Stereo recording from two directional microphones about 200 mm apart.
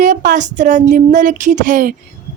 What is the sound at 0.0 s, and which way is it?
Speech, 45° right (ahead or behind).